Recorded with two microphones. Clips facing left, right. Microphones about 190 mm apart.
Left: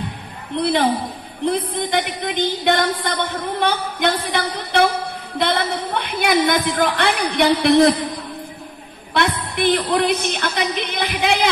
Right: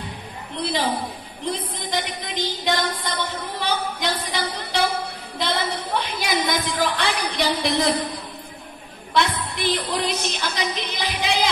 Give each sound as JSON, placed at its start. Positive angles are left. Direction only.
{"t": 0.6, "sound": "a woman's voice", "side_deg": 60}
{"t": 5.9, "sound": "a woman's voice", "side_deg": 60}
{"t": 9.1, "sound": "a woman's voice", "side_deg": 55}